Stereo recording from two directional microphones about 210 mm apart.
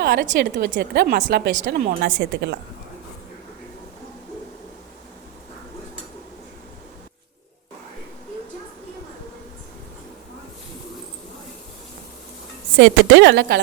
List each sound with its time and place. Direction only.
0.0 s a woman's voice: 45° right (ahead or behind)
12.8 s a woman's voice: 60° right (ahead or behind)